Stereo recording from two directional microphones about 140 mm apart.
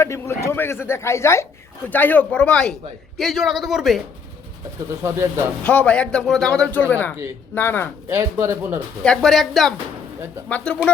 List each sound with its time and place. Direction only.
0.0 s speech: 20° left (ahead or behind); by 4.0 s centre (ahead or behind)
5.0 s speech: 20° right (ahead or behind)
5.6 s speech: 10° left (ahead or behind)
8.1 s speech: 20° right (ahead or behind)
9.0 s speech: centre (ahead or behind)